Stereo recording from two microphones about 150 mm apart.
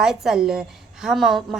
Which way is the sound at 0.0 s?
Centre (ahead or behind).